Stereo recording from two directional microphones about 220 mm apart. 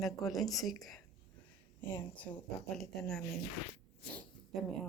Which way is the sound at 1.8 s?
10° left (ahead or behind).